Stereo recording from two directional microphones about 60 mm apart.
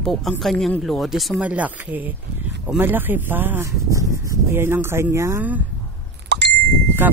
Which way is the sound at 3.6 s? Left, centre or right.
Right.